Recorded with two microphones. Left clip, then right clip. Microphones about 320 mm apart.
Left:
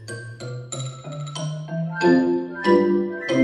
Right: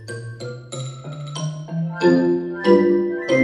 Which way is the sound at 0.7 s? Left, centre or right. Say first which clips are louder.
Even; centre.